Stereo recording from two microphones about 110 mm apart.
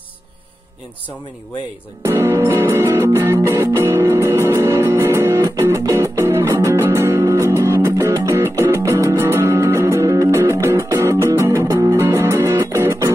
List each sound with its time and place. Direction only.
2.0 s music: 25° right (ahead or behind)